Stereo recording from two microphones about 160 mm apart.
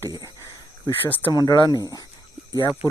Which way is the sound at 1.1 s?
10° left (ahead or behind).